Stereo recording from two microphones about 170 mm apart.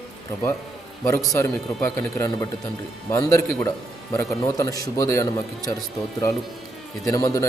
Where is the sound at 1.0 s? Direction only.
20° left (ahead or behind).